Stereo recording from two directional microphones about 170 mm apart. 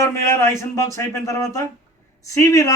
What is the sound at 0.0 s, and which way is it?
A man's voice, 15° left (ahead or behind).